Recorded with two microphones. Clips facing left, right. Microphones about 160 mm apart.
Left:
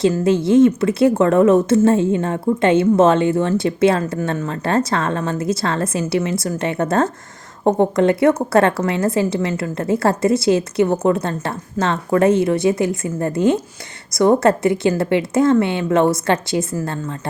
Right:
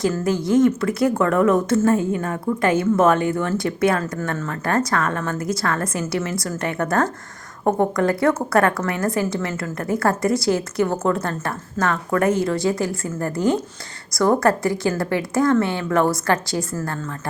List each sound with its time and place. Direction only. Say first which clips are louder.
0.0 s speech: left 5 dB; 25° left (ahead or behind)